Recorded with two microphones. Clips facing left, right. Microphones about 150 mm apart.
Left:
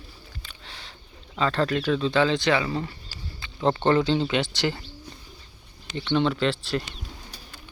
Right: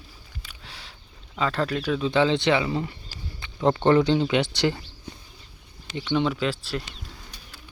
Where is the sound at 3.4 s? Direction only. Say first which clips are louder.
Even; 20° right (ahead or behind).